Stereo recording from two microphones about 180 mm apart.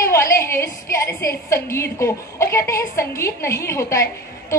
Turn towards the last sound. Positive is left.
turn(degrees=15)  # may be behind; listen again after turning